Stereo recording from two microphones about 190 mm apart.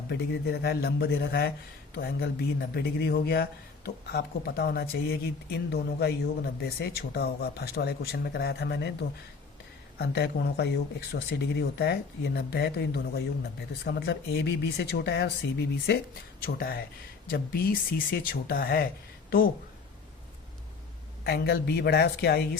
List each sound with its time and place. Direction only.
0.1 s speech: 60° left (ahead or behind)
10.0 s speech: 60° left (ahead or behind)
21.2 s speech: 55° left (ahead or behind)